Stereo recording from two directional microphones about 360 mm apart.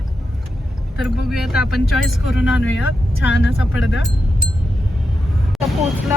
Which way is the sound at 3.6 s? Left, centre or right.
Centre.